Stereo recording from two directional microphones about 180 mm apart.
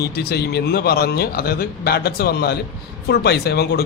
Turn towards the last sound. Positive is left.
turn(degrees=60)  # may be behind; listen again after turning